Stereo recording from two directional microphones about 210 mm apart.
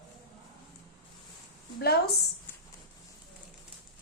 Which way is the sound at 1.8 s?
50° left (ahead or behind).